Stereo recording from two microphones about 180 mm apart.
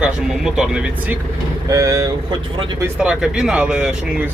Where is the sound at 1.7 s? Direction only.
20° right (ahead or behind).